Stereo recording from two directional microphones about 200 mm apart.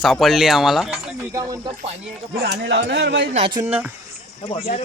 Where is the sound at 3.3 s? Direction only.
25° right (ahead or behind).